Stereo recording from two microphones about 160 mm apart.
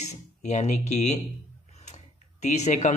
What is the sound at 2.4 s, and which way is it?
Speech, 45° left (ahead or behind).